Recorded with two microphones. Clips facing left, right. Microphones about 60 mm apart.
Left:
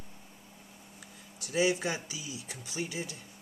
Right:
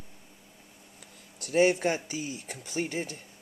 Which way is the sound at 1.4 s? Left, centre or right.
Right.